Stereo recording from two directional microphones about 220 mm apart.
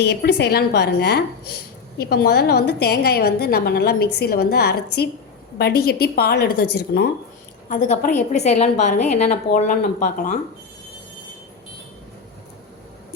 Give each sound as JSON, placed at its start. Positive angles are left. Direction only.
{"t": 0.0, "sound": "a woman's voice", "side_deg": 50}
{"t": 7.7, "sound": "a woman's voice", "side_deg": 35}